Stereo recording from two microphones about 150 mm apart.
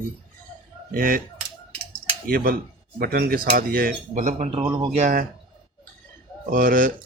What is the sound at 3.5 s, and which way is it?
Speech, 75° right (ahead or behind).